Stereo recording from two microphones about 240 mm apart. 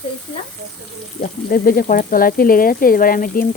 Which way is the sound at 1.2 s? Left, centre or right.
Left.